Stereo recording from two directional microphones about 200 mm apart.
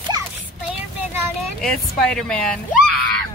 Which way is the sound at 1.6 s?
Centre (ahead or behind).